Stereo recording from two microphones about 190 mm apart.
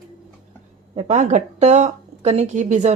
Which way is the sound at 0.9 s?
35° right (ahead or behind).